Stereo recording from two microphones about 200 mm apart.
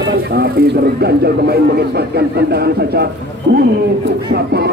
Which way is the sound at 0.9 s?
50° right (ahead or behind).